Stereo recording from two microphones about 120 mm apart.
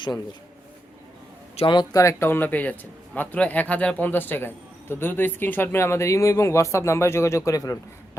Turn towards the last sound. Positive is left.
turn(degrees=30)  # may be behind; listen again after turning